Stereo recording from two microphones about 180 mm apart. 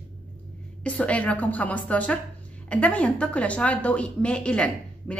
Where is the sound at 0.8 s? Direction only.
5° left (ahead or behind).